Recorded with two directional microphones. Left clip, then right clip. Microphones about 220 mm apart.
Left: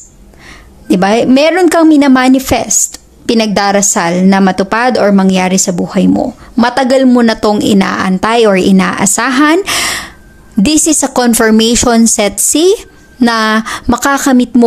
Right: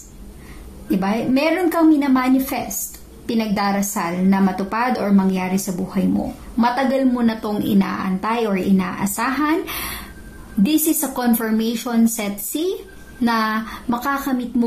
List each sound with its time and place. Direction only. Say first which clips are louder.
0.8 s a woman's voice: left 13 dB; 50° left (ahead or behind)